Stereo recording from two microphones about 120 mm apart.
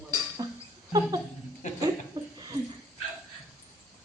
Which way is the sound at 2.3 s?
35° right (ahead or behind).